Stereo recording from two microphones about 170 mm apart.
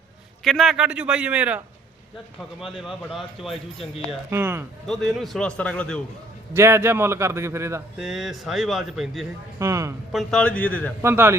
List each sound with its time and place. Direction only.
0.4 s speech: centre (ahead or behind)
4.3 s a man's voice: 15° right (ahead or behind)
4.9 s speech: centre (ahead or behind)
6.5 s a man's voice: 15° right (ahead or behind)
7.9 s speech: 5° right (ahead or behind)
9.6 s a man's voice: 15° right (ahead or behind)
10.1 s a man's voice: centre (ahead or behind)
11.0 s a man's voice: 15° right (ahead or behind)